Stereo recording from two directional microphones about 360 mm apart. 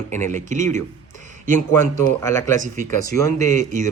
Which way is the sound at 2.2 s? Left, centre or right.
Centre.